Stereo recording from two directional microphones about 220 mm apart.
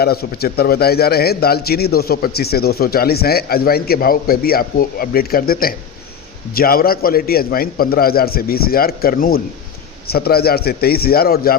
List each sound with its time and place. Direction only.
0.0 s a man's voice: 45° left (ahead or behind)